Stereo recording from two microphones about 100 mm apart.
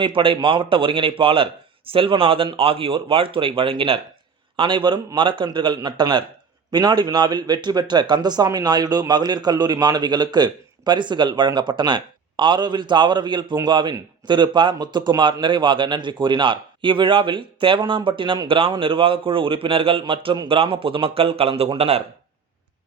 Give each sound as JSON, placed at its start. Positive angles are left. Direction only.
{"t": 0.0, "sound": "a man's voice", "side_deg": -60}
{"t": 21.8, "sound": "a man's voice", "side_deg": -90}